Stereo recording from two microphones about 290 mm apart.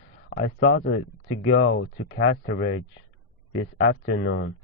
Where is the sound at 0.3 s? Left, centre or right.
Left.